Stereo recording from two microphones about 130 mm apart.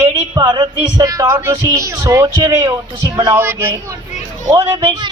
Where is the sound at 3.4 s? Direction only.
20° right (ahead or behind).